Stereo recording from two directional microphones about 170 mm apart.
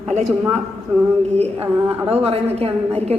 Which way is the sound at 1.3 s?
35° right (ahead or behind).